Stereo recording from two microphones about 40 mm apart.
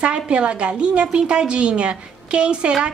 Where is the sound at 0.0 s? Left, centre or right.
Right.